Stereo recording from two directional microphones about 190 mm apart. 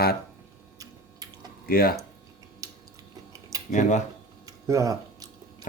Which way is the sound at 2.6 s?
20° right (ahead or behind).